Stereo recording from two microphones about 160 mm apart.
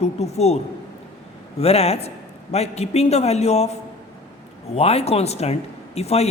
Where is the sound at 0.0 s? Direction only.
40° left (ahead or behind).